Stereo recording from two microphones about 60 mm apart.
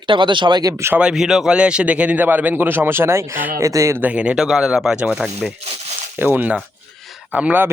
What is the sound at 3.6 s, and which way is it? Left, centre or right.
Speech, right.